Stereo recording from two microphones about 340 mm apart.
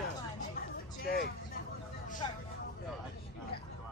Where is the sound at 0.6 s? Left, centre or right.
Left.